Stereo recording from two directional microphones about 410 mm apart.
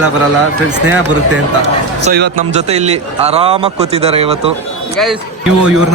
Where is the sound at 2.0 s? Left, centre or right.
Centre.